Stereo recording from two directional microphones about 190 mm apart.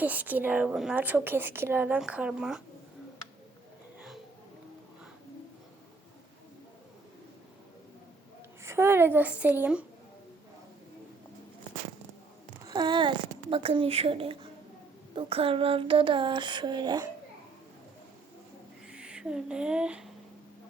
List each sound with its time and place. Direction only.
0.0 s a woman's voice: 10° right (ahead or behind)
8.6 s a woman's voice: 15° right (ahead or behind)
12.6 s a child's voice: 20° right (ahead or behind)
15.1 s a sound: 30° right (ahead or behind)
18.9 s speech: 5° right (ahead or behind)